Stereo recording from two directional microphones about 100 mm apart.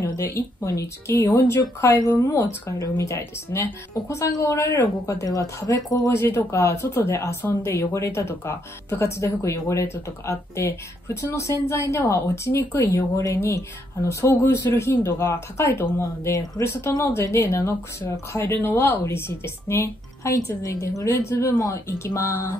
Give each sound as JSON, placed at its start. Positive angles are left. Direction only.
{"t": 0.2, "sound": "speech", "side_deg": 30}